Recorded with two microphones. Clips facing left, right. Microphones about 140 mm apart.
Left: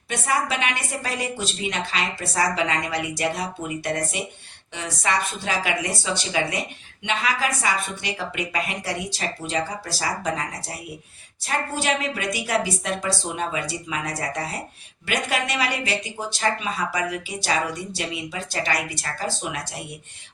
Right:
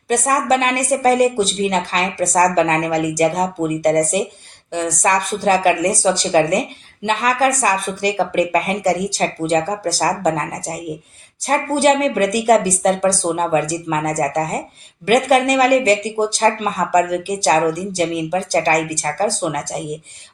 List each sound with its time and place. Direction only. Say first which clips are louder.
0.1 s a woman's voice: right 9 dB; 40° right (ahead or behind)